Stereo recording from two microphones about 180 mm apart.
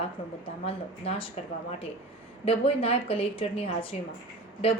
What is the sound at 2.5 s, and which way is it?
A woman's voice, 30° left (ahead or behind).